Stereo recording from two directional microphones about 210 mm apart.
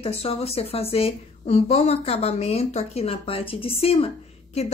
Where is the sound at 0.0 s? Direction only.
30° left (ahead or behind).